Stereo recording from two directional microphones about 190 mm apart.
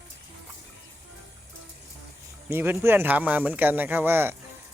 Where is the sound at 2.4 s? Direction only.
10° right (ahead or behind).